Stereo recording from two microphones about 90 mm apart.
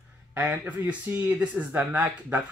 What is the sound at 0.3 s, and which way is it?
Speech, 20° right (ahead or behind).